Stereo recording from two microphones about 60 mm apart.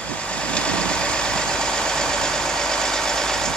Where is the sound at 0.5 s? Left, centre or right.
Centre.